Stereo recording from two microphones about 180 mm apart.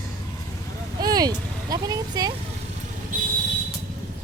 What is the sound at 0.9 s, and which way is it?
Speech, 20° right (ahead or behind).